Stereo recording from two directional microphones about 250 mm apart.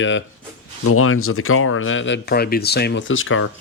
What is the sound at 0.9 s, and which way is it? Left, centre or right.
Speech, left.